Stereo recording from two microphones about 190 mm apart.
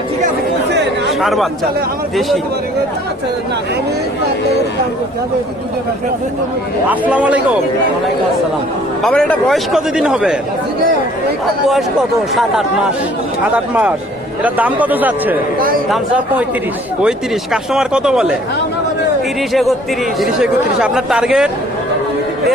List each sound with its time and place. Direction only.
0.7 s chatter: 65° right (ahead or behind)
1.2 s speech: centre (ahead or behind)
6.8 s a man's voice: 10° right (ahead or behind)
9.0 s speech: 5° left (ahead or behind)
12.3 s speech: centre (ahead or behind)
14.4 s a man's voice: 10° right (ahead or behind)
17.0 s speech: 5° right (ahead or behind)
20.1 s speech: 5° right (ahead or behind)